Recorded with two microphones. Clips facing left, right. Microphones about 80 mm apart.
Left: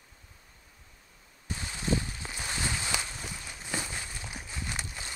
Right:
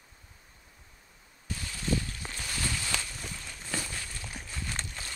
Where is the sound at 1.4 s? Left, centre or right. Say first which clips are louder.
Left 2 dB; left.